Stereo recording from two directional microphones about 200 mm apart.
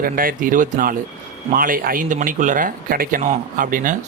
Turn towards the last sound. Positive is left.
turn(degrees=-40)  # may be behind; listen again after turning